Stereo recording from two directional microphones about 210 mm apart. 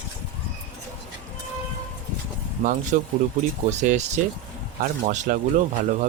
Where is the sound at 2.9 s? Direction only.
40° right (ahead or behind).